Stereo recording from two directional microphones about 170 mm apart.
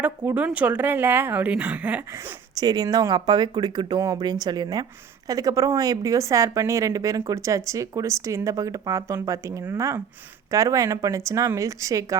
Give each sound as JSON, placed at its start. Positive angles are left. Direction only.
{"t": 0.0, "sound": "a woman's voice", "side_deg": -10}
{"t": 2.6, "sound": "speech", "side_deg": -20}